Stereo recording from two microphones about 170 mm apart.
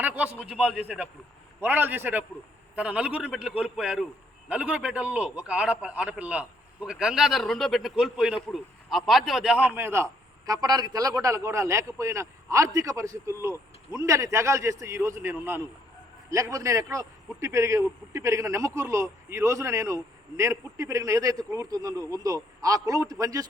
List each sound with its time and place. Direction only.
0.0 s a man's voice: 10° right (ahead or behind)